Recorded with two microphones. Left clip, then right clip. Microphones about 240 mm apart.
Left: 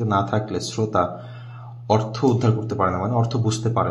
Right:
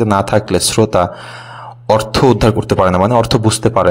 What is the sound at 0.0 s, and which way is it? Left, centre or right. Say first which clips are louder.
A man's voice: right 9 dB; right.